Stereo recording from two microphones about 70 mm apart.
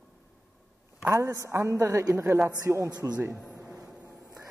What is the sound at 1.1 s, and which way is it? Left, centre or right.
Speech, right.